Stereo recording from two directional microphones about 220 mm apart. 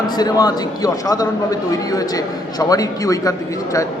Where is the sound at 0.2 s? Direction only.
15° left (ahead or behind).